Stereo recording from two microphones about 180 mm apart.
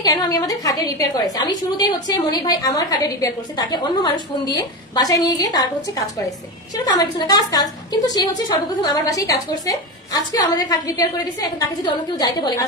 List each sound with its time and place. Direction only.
0.0 s a woman's voice: 20° left (ahead or behind)